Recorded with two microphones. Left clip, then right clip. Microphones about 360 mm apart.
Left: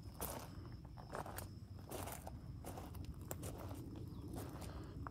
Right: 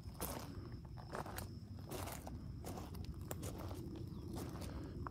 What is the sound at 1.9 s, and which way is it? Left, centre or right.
Crushing, centre.